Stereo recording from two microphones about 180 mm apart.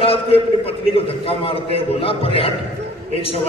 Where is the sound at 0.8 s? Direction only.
30° left (ahead or behind).